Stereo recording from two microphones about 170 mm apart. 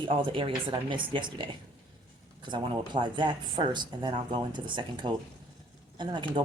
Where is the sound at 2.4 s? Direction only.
25° right (ahead or behind).